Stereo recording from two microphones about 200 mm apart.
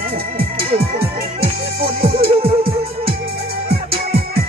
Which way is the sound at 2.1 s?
30° right (ahead or behind).